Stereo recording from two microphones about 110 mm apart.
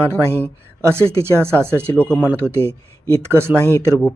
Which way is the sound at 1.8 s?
10° left (ahead or behind).